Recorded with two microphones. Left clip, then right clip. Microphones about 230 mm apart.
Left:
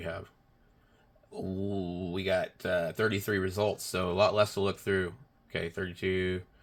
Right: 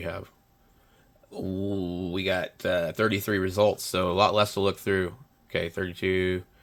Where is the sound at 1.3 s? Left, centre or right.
Right.